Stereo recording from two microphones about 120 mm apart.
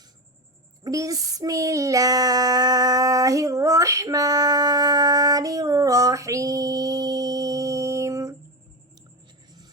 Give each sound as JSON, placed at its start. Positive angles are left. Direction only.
{"t": 0.9, "sound": "child singing", "side_deg": -30}